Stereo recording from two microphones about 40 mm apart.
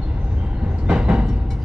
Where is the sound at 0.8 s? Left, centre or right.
Right.